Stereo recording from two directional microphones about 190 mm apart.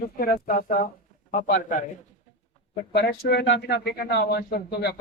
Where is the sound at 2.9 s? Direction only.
60° left (ahead or behind).